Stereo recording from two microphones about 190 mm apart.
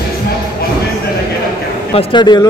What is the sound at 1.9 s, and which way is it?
Speech, 25° left (ahead or behind).